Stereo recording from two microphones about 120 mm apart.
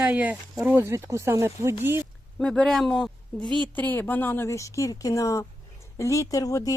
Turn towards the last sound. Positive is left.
turn(degrees=30)  # may be behind; listen again after turning